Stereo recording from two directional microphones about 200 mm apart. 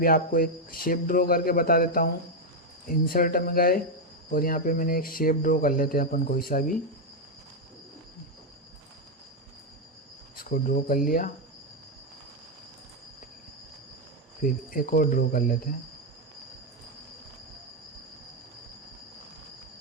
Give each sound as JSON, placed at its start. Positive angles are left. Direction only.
{"t": 0.0, "sound": "speech", "side_deg": 45}
{"t": 10.5, "sound": "speech", "side_deg": 45}
{"t": 14.4, "sound": "speech", "side_deg": 45}